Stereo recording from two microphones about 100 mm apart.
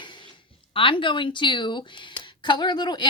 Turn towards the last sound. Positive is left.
turn(degrees=50)  # may be behind; listen again after turning